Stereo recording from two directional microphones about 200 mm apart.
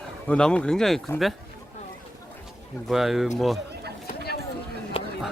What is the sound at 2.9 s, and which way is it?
Speech, centre (ahead or behind).